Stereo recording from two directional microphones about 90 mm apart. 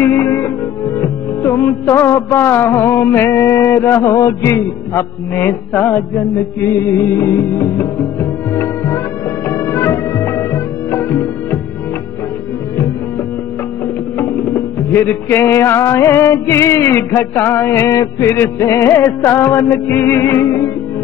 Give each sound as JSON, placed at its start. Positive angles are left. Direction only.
{"t": 0.0, "sound": "music", "side_deg": 30}
{"t": 14.1, "sound": "music", "side_deg": 25}